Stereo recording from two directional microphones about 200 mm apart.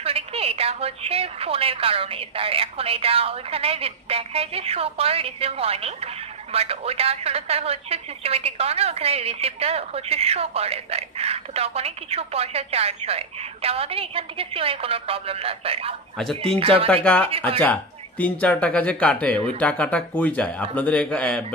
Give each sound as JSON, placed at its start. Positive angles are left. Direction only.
{"t": 0.0, "sound": "a woman's voice", "side_deg": -30}
{"t": 16.9, "sound": "a man's voice", "side_deg": 5}